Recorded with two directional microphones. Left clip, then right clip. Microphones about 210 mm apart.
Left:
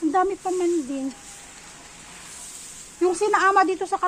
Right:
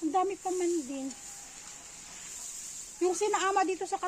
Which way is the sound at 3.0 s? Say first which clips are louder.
Left 9 dB; 5° left (ahead or behind).